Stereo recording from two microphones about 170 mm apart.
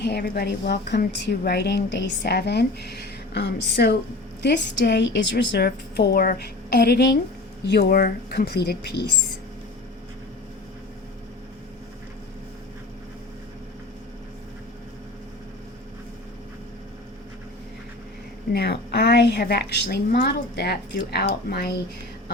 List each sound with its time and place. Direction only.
0.0 s a woman's voice: 75° left (ahead or behind)
4.4 s a woman's voice: 90° left
7.6 s a woman's voice: 70° left (ahead or behind)
18.5 s a woman's voice: 75° left (ahead or behind)